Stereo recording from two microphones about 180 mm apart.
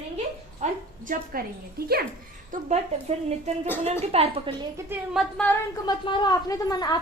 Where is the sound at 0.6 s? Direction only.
40° right (ahead or behind).